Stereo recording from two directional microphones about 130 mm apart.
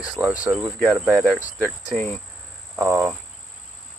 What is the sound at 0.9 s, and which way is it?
Speech, 5° right (ahead or behind).